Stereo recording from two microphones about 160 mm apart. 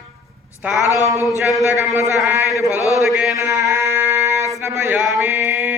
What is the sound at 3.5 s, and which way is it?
Music, 20° right (ahead or behind).